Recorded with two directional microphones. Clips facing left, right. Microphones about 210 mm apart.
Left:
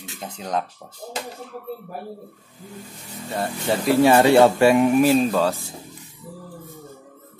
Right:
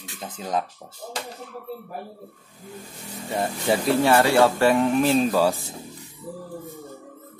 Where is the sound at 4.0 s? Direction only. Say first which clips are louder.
Left 6 dB; 15° left (ahead or behind).